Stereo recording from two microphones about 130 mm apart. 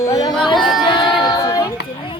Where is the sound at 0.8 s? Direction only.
35° left (ahead or behind).